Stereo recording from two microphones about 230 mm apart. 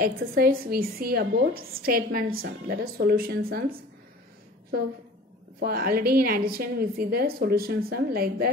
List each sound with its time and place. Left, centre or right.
0.0 s a woman's voice: right
5.6 s a woman's voice: right